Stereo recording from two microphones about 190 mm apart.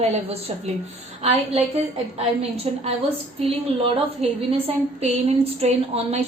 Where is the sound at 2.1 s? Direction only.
35° right (ahead or behind).